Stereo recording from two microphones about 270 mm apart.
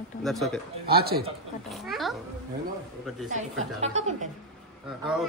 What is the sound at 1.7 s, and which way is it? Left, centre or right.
Speech, centre.